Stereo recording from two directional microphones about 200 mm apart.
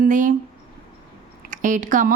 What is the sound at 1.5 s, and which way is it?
Speech, 40° right (ahead or behind).